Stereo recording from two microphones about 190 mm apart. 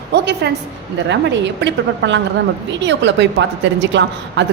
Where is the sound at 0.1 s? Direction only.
60° right (ahead or behind).